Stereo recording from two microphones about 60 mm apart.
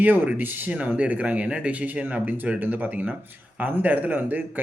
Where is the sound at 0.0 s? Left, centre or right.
Right.